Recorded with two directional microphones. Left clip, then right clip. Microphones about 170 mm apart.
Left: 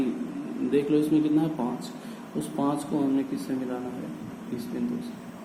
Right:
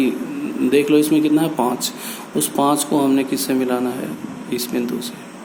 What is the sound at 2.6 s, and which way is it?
A man's voice, 55° right (ahead or behind).